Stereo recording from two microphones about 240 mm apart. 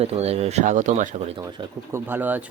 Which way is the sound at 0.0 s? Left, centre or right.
Right.